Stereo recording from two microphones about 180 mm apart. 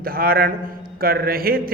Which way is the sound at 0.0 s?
55° right (ahead or behind).